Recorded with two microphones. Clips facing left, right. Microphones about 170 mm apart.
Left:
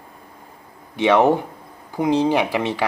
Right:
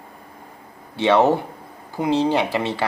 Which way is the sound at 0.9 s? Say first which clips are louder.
Left 1 dB; 15° left (ahead or behind).